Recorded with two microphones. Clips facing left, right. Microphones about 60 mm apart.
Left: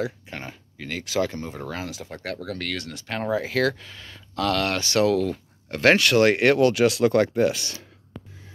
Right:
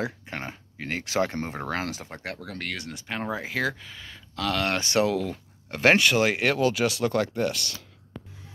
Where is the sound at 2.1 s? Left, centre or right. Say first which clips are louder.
Left 4 dB; centre.